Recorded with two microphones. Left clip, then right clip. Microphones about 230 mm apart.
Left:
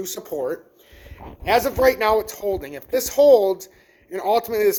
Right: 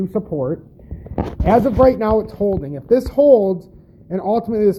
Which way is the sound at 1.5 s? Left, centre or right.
Centre.